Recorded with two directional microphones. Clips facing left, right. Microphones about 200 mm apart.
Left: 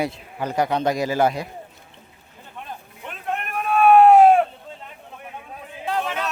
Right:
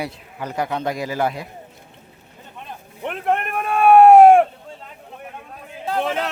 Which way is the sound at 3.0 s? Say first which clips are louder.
Right 8 dB; 65° right (ahead or behind).